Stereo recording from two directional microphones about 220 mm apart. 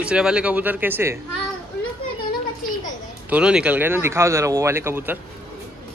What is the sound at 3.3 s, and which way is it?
Speech, 5° right (ahead or behind).